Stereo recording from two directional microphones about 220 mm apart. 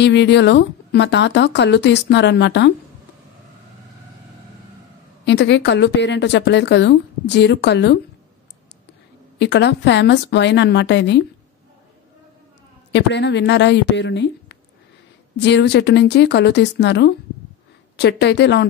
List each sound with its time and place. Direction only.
0.0 s a woman's voice: 50° left (ahead or behind)
5.2 s a woman's voice: 50° left (ahead or behind)
9.4 s a woman's voice: 50° left (ahead or behind)
12.9 s a woman's voice: 50° left (ahead or behind)